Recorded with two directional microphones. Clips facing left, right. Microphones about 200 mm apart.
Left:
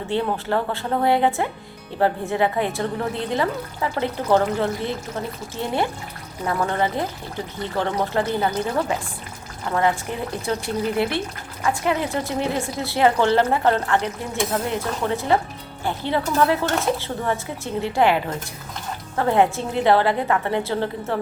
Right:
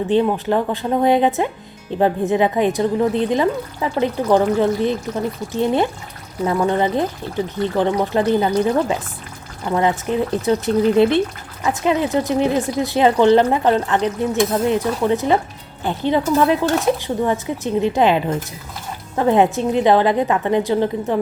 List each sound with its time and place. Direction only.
0.1 s speech: 15° right (ahead or behind)
10.1 s speech: 20° right (ahead or behind)